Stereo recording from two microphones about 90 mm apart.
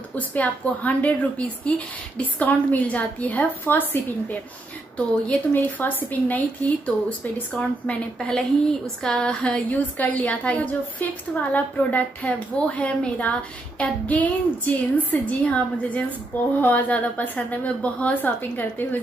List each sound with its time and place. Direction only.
0.2 s a woman's voice: 20° left (ahead or behind)
5.5 s a woman's voice: 20° left (ahead or behind)